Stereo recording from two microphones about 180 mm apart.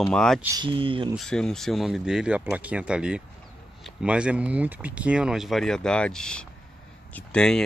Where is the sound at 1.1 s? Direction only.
5° left (ahead or behind).